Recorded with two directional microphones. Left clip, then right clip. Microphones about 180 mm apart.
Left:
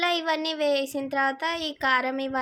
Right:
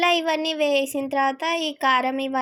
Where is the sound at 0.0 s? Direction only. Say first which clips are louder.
Right 4 dB; 15° right (ahead or behind).